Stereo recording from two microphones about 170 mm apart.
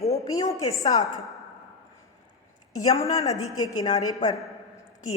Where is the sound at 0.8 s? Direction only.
20° left (ahead or behind).